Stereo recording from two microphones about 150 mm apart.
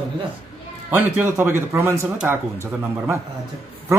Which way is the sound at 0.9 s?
15° right (ahead or behind).